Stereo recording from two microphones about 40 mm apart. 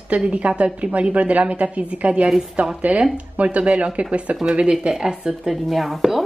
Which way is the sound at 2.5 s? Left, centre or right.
Right.